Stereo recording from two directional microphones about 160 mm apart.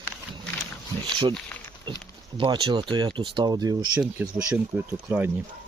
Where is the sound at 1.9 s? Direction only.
30° right (ahead or behind).